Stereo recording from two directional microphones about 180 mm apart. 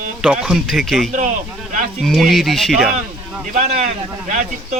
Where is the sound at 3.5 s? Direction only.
35° right (ahead or behind).